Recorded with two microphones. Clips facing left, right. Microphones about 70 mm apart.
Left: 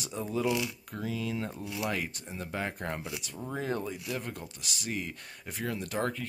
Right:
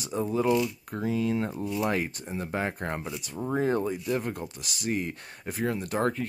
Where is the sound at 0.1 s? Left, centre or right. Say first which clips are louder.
Right 6 dB; right.